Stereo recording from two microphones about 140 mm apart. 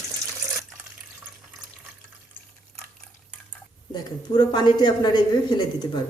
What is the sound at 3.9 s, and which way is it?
Speech, 30° left (ahead or behind).